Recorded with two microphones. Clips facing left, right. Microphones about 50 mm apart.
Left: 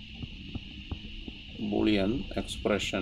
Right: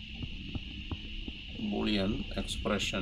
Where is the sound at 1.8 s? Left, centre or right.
Left.